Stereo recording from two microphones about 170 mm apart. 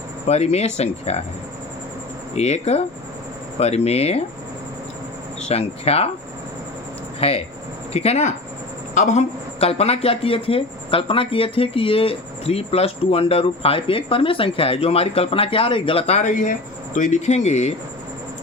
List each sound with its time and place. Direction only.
0.3 s a woman's voice: 40° left (ahead or behind)
2.3 s a woman's voice: 40° left (ahead or behind)
5.4 s a woman's voice: 40° left (ahead or behind)
7.2 s a woman's voice: 35° left (ahead or behind)